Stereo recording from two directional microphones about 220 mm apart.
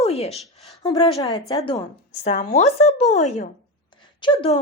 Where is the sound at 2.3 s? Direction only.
30° left (ahead or behind).